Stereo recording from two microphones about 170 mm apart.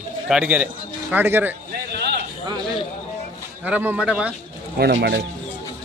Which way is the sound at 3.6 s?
10° right (ahead or behind).